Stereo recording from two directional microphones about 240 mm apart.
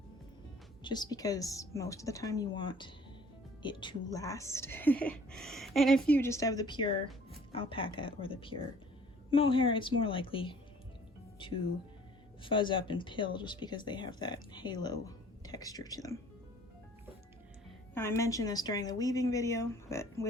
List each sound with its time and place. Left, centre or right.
0.9 s a woman's voice: centre
17.9 s a woman's voice: centre